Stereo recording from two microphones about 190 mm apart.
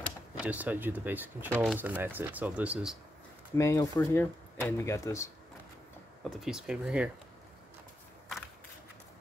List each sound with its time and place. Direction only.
0.4 s speech: 10° right (ahead or behind)
3.5 s speech: 15° left (ahead or behind)
6.3 s speech: 5° right (ahead or behind)